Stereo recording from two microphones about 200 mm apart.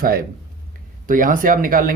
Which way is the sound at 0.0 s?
45° right (ahead or behind).